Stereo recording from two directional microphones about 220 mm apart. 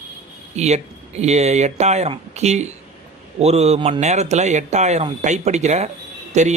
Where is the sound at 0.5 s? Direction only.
30° right (ahead or behind).